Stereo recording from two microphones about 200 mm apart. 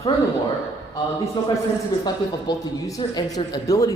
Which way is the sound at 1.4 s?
20° left (ahead or behind).